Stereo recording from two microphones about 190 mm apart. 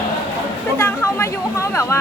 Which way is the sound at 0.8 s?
15° left (ahead or behind).